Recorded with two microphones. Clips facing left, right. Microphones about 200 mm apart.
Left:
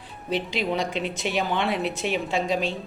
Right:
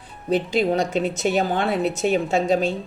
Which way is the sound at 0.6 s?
40° right (ahead or behind).